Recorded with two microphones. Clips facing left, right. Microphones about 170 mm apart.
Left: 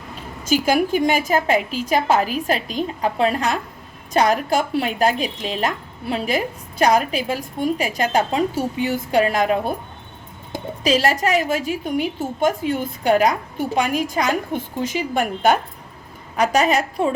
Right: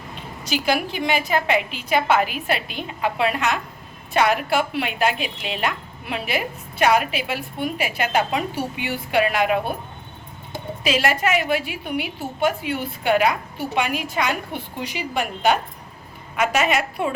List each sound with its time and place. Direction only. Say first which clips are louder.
0.4 s a woman's voice: left 5 dB; 45° left (ahead or behind)
16.3 s a woman's voice: left 3 dB; 35° left (ahead or behind)